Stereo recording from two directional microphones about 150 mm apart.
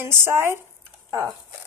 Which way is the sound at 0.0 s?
15° right (ahead or behind).